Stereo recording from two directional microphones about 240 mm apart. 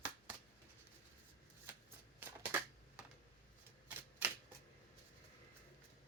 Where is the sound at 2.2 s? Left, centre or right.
Centre.